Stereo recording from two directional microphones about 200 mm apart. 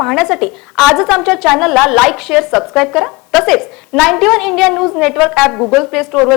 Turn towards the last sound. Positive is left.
turn(degrees=0)  # may be behind; listen again after turning